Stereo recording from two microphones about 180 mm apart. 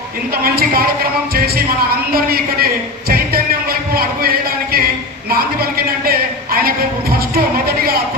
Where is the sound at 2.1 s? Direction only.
55° right (ahead or behind).